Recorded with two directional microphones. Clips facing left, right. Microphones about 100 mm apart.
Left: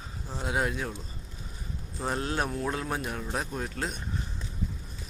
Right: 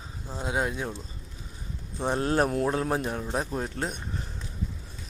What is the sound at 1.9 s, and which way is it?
Speech, 25° right (ahead or behind).